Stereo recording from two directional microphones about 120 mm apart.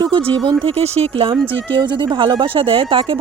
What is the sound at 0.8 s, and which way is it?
Speech, 60° right (ahead or behind).